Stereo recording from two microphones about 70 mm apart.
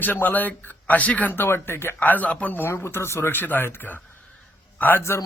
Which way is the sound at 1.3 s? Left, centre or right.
Left.